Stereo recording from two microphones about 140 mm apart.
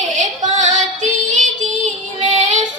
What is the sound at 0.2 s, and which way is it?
Female singing, 60° right (ahead or behind).